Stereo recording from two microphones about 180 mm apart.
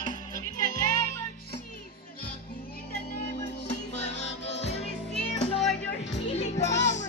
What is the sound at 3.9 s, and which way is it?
Music, 35° left (ahead or behind).